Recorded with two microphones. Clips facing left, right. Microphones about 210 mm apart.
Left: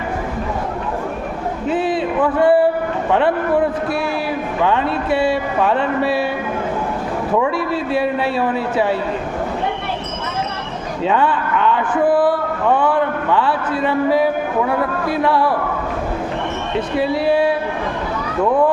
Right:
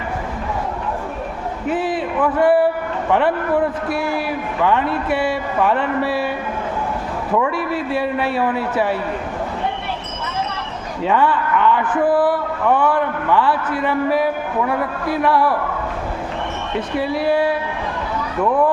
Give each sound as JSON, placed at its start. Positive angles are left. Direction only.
{"t": 1.6, "sound": "a sound", "side_deg": 25}
{"t": 3.1, "sound": "speech", "side_deg": 20}
{"t": 4.6, "sound": "speech", "side_deg": 20}
{"t": 7.7, "sound": "speech", "side_deg": 20}
{"t": 11.0, "sound": "speech", "side_deg": 20}
{"t": 13.3, "sound": "speech", "side_deg": 20}
{"t": 17.0, "sound": "speech", "side_deg": 25}